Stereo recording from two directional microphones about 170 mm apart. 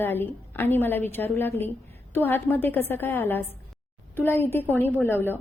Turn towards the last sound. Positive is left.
turn(degrees=15)  # may be behind; listen again after turning